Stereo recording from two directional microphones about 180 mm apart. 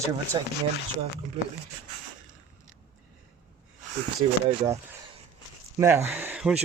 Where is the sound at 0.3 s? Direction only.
25° right (ahead or behind).